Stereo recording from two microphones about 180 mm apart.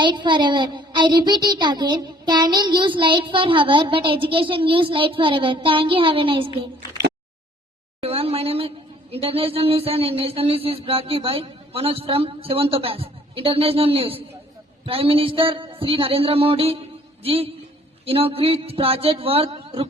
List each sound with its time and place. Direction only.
0.0 s child singing: 25° right (ahead or behind)
8.0 s a woman's voice: 35° right (ahead or behind)
14.8 s a sound: 30° right (ahead or behind)